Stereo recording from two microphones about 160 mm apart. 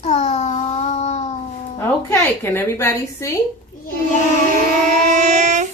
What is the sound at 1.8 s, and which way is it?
A woman's voice, 15° left (ahead or behind).